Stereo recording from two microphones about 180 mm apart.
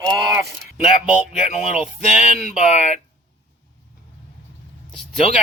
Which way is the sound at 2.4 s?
40° left (ahead or behind).